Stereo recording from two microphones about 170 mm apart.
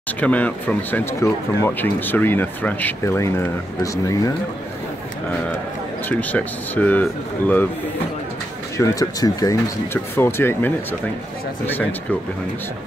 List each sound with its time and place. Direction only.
0.2 s speech: 10° left (ahead or behind)
6.0 s speech: 10° left (ahead or behind)
8.7 s speech: 20° left (ahead or behind)